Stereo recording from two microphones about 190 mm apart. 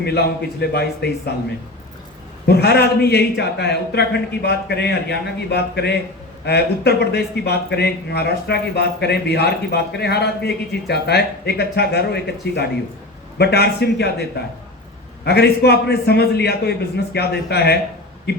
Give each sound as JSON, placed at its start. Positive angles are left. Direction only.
{"t": 0.0, "sound": "speech", "side_deg": 60}
{"t": 2.5, "sound": "speech", "side_deg": 60}